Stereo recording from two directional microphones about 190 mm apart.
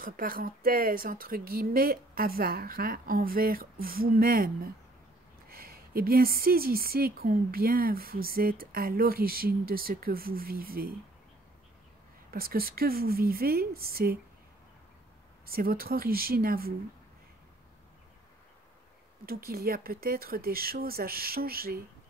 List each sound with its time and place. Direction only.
0.0 s speech: 50° right (ahead or behind)
12.3 s speech: 50° right (ahead or behind)
15.4 s speech: 50° right (ahead or behind)
19.2 s speech: 50° right (ahead or behind)